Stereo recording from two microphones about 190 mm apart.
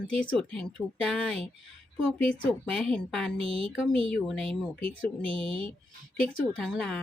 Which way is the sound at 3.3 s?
30° right (ahead or behind).